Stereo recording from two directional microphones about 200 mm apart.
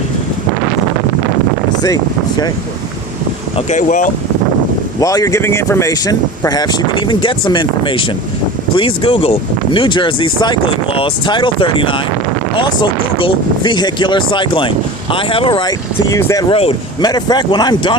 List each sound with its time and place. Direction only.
3.7 s speech: 40° left (ahead or behind)
4.9 s speech: 15° left (ahead or behind)